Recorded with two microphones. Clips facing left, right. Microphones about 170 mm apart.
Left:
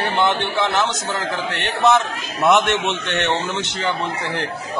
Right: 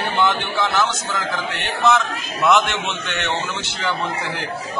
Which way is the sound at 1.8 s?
30° left (ahead or behind).